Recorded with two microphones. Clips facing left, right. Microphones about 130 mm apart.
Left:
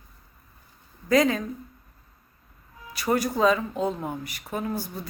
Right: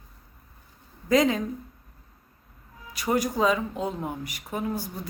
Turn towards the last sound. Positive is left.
turn(degrees=-15)  # may be behind; listen again after turning